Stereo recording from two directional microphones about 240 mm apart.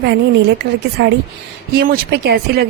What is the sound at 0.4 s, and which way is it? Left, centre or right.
A woman's voice, right.